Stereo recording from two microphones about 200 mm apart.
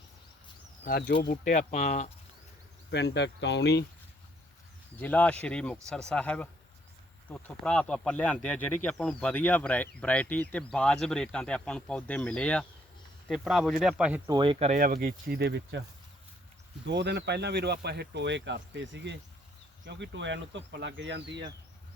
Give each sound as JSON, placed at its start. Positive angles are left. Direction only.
{"t": 0.9, "sound": "speech", "side_deg": 45}
{"t": 2.9, "sound": "speech", "side_deg": 60}
{"t": 4.9, "sound": "speech", "side_deg": 5}
{"t": 14.3, "sound": "speech", "side_deg": -25}
{"t": 14.8, "sound": "speech", "side_deg": -45}
{"t": 16.8, "sound": "speech", "side_deg": -60}